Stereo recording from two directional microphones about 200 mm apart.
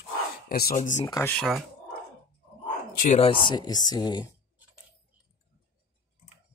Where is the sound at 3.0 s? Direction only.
35° left (ahead or behind).